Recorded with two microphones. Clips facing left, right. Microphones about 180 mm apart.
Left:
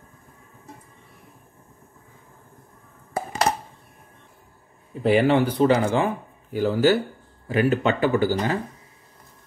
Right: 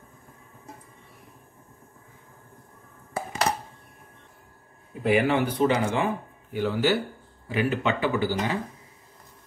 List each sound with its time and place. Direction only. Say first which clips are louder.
5.0 s speech: left 4 dB; 35° left (ahead or behind)